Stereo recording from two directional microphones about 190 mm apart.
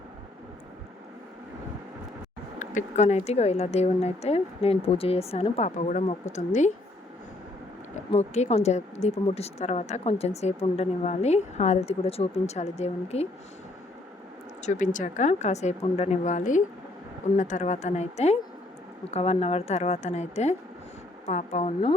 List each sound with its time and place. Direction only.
2.6 s a woman's voice: 40° left (ahead or behind)
8.1 s a woman's voice: 35° left (ahead or behind)
14.6 s a woman's voice: 40° left (ahead or behind)